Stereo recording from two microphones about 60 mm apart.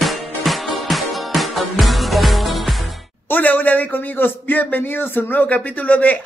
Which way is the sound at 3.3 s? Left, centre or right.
Left.